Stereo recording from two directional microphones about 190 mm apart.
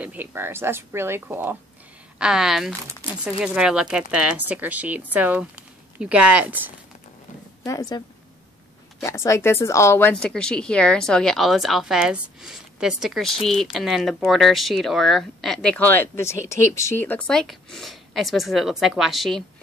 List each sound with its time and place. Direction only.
0.0 s a woman's voice: 10° right (ahead or behind)
7.6 s speech: 20° left (ahead or behind)
9.0 s a woman's voice: 15° left (ahead or behind)